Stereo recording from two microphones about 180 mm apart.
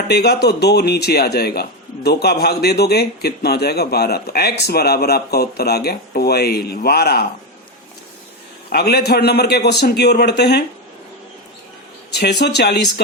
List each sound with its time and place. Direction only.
0.1 s speech: 65° left (ahead or behind)
8.7 s speech: 65° left (ahead or behind)
12.1 s speech: 65° left (ahead or behind)